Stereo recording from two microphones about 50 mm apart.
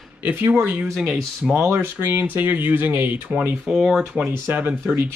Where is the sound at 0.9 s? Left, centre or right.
Centre.